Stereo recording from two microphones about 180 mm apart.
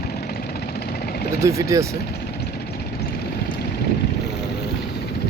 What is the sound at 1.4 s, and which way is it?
Speech, 15° right (ahead or behind).